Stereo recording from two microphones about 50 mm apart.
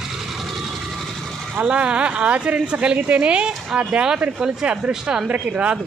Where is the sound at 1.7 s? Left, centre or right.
Right.